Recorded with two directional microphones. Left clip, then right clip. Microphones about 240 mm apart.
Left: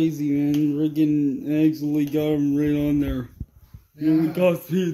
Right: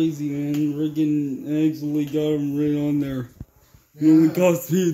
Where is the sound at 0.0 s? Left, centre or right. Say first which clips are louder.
Left 2 dB; left.